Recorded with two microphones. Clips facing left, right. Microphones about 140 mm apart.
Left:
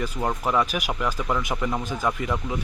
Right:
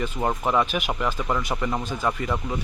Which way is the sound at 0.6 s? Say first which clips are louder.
Right 1 dB; 10° left (ahead or behind).